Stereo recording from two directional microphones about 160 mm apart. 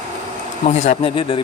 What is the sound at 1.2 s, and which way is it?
Speech, 30° left (ahead or behind).